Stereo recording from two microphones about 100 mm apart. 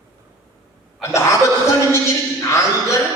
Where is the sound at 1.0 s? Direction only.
30° left (ahead or behind).